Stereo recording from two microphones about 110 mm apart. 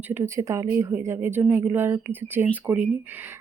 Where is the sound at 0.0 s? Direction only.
20° right (ahead or behind).